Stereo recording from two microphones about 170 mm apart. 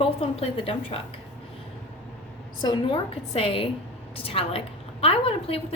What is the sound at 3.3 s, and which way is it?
A woman's voice, 35° left (ahead or behind).